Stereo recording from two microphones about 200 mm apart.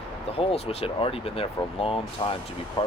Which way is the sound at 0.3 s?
30° left (ahead or behind).